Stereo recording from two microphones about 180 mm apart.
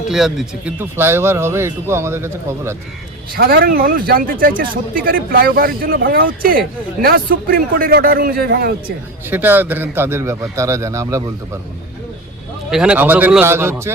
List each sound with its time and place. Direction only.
0.1 s speech: centre (ahead or behind)
3.3 s a man's voice: 55° right (ahead or behind)
9.3 s speech: 10° right (ahead or behind)
12.7 s speech: 5° right (ahead or behind)